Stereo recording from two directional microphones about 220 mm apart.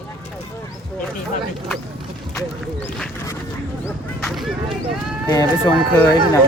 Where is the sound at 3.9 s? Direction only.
Centre (ahead or behind).